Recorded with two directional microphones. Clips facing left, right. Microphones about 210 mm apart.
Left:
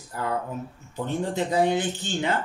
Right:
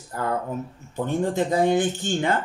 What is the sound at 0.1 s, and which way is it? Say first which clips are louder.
Speech: right 2 dB; 50° right (ahead or behind).